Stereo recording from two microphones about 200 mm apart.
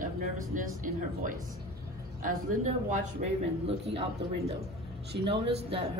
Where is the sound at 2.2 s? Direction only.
40° right (ahead or behind).